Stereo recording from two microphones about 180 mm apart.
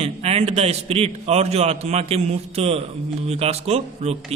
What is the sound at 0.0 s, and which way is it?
A man's voice, 35° right (ahead or behind).